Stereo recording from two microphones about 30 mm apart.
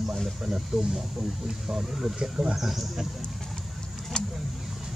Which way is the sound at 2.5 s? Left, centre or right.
Centre.